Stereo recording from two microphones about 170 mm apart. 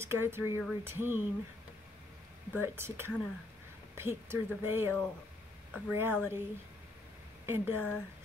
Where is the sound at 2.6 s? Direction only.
15° right (ahead or behind).